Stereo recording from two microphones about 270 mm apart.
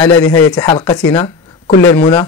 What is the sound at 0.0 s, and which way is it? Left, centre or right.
Speech, centre.